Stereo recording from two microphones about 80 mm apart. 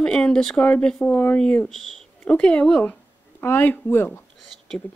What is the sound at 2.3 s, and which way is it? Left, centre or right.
Speech, centre.